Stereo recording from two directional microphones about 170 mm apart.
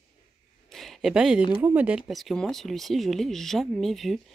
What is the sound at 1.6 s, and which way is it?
Speech, 10° right (ahead or behind).